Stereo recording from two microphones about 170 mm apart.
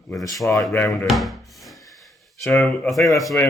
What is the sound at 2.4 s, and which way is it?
Speech, 5° left (ahead or behind).